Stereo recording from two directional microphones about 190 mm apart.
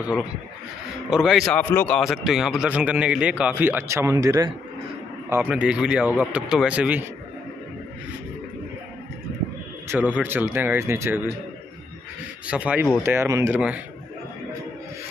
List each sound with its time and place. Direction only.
1.1 s a man's voice: centre (ahead or behind)
1.5 s a man's voice: 10° left (ahead or behind)
2.0 s a man's voice: centre (ahead or behind); by 4.5 s 20° right (ahead or behind)
5.3 s a man's voice: 5° right (ahead or behind)
9.8 s a man's voice: 10° right (ahead or behind)
12.4 s a man's voice: 5° right (ahead or behind)